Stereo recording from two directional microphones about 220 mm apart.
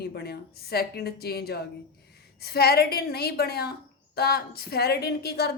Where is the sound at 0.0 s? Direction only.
45° left (ahead or behind).